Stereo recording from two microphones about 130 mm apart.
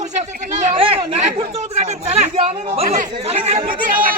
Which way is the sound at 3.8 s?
90° right.